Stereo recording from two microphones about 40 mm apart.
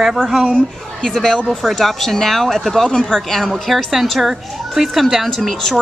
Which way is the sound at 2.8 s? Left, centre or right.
Centre.